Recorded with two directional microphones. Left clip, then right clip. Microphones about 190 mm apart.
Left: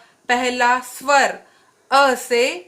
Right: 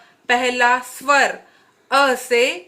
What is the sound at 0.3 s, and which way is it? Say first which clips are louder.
A woman's voice: right 1 dB; 55° left (ahead or behind).